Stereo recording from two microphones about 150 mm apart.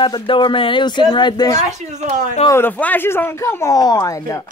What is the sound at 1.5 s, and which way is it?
Speech, 50° right (ahead or behind).